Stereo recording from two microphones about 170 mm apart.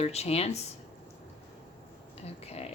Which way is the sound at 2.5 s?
40° left (ahead or behind).